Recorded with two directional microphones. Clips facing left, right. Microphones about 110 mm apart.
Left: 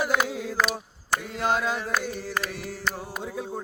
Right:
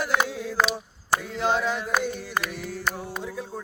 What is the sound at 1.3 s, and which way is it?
Carnatic music, 5° left (ahead or behind).